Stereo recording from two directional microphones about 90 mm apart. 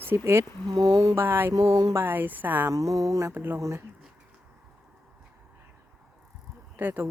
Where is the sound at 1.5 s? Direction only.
45° right (ahead or behind).